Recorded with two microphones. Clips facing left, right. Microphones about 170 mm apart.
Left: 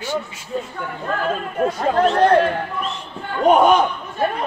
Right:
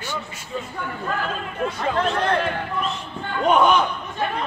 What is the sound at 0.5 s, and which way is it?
Speech, 45° left (ahead or behind).